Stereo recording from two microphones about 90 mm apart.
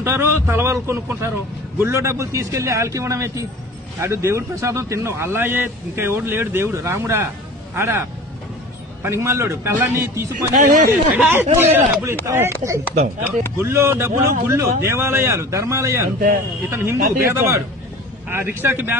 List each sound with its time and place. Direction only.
0.0 s a man's voice: 30° right (ahead or behind)
9.0 s a man's voice: 30° right (ahead or behind)